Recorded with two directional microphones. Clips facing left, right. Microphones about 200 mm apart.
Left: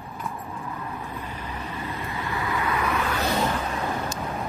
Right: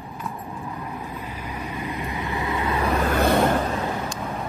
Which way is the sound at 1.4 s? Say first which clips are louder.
Right 2 dB; 10° right (ahead or behind).